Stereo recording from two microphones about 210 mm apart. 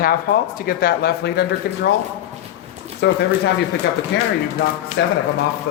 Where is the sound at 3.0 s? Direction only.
55° left (ahead or behind).